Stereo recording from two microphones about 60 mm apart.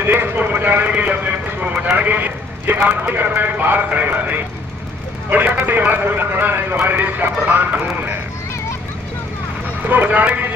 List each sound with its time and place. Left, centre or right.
0.0 s a man's voice: right
9.8 s speech: right